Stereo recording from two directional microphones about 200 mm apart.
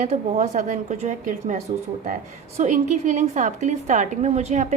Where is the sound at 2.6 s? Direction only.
35° right (ahead or behind).